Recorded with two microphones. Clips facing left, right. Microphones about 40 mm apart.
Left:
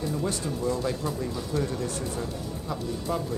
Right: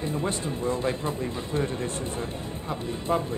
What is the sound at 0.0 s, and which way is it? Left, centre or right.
Speech, right.